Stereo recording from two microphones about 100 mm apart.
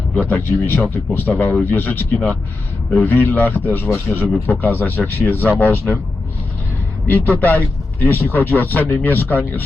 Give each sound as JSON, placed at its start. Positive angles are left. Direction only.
{"t": 0.1, "sound": "speech", "side_deg": 15}
{"t": 7.1, "sound": "speech", "side_deg": 15}